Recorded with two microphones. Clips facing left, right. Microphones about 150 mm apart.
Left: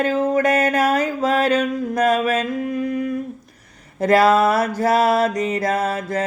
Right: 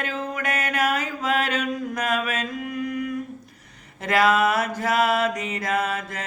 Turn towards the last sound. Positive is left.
turn(degrees=35)  # may be behind; listen again after turning